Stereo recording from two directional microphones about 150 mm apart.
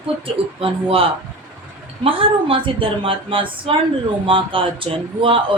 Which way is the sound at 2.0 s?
35° right (ahead or behind).